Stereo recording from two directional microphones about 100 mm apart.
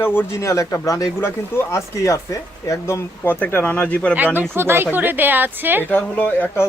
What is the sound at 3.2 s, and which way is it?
Speech, 20° left (ahead or behind).